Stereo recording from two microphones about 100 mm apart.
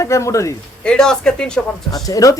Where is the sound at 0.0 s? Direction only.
30° left (ahead or behind).